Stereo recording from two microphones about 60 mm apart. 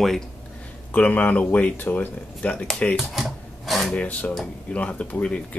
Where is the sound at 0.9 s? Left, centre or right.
Left.